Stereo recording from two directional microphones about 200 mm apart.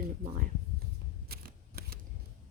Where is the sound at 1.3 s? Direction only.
50° right (ahead or behind).